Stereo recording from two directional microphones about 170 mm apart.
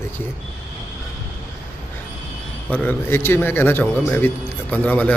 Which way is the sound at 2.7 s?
10° left (ahead or behind).